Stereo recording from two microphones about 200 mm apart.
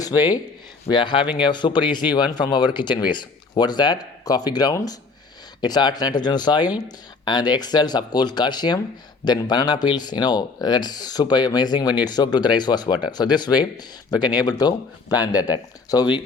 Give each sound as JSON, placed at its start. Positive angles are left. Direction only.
{"t": 0.1, "sound": "speech", "side_deg": -10}
{"t": 0.9, "sound": "speech", "side_deg": 25}